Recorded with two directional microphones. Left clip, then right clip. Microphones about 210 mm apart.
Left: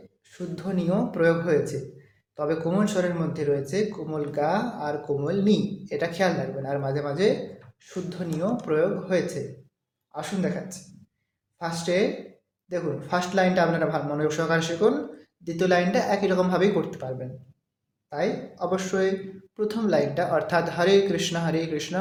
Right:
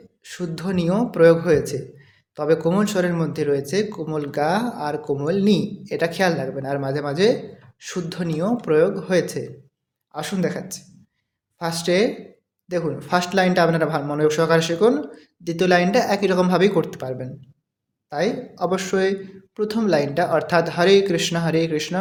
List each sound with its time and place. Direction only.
0.2 s speech: 40° right (ahead or behind)